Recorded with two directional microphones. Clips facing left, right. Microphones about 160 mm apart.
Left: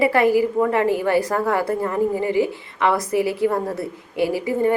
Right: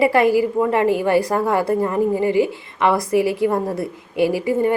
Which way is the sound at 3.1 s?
15° right (ahead or behind).